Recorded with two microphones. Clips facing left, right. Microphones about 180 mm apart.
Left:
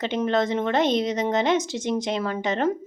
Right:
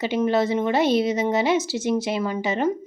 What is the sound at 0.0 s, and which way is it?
A woman's voice, 5° right (ahead or behind).